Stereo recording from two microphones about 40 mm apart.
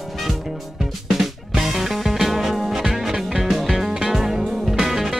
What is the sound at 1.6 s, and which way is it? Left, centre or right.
Music, centre.